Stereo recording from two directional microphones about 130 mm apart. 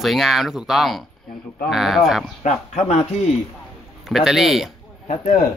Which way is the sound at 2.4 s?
60° left (ahead or behind).